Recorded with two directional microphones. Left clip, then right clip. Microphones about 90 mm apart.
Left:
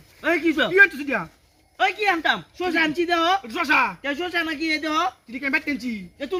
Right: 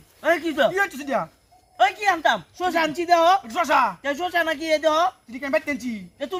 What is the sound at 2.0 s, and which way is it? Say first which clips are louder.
Speech: right 1 dB; 30° right (ahead or behind).